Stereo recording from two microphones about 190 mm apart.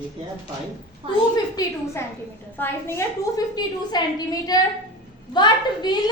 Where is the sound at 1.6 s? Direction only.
15° left (ahead or behind).